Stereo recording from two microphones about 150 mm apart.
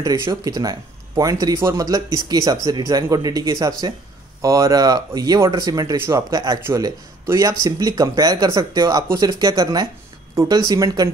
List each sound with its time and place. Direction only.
0.0 s speech: 25° right (ahead or behind)